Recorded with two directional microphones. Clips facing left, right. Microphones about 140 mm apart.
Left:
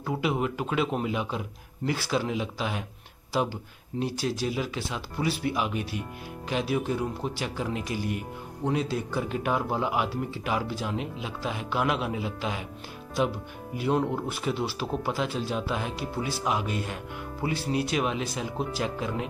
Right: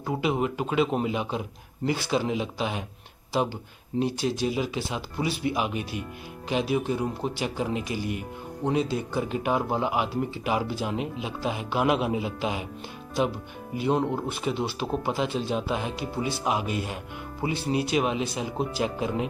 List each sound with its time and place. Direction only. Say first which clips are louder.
0.0 s speech: right 2 dB; centre (ahead or behind)
4.0 s speech: right 3 dB; centre (ahead or behind)
13.7 s speech: right 1 dB; 5° left (ahead or behind)